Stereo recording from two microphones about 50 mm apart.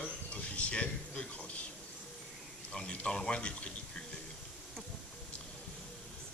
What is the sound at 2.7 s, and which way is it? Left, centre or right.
A man's voice, left.